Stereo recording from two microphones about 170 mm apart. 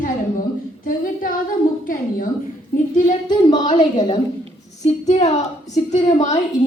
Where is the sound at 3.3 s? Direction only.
25° left (ahead or behind).